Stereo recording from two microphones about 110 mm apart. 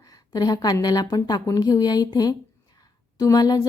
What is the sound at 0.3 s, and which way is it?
Speech, 35° left (ahead or behind).